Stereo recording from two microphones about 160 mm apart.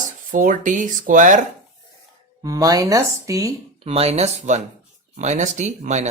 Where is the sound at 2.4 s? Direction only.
25° right (ahead or behind).